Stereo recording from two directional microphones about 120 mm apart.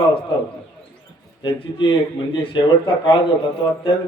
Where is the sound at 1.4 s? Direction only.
45° left (ahead or behind).